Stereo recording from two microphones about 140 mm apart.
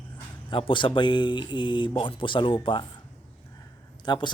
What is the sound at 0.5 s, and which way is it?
A man's voice, 35° left (ahead or behind).